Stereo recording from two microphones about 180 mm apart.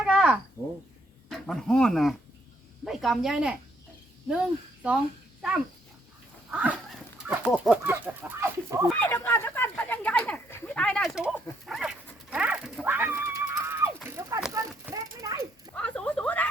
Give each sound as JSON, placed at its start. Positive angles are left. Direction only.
{"t": 0.0, "sound": "a sound", "side_deg": -5}
{"t": 0.6, "sound": "speech", "side_deg": 15}
{"t": 1.3, "sound": "speech", "side_deg": 5}
{"t": 6.5, "sound": "dog", "side_deg": -5}
{"t": 7.8, "sound": "speech", "side_deg": -10}
{"t": 8.9, "sound": "speech", "side_deg": 10}
{"t": 11.6, "sound": "dog", "side_deg": 0}
{"t": 12.3, "sound": "a sound", "side_deg": -5}
{"t": 15.7, "sound": "speech", "side_deg": 5}